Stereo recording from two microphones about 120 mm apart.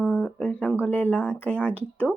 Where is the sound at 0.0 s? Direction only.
5° left (ahead or behind).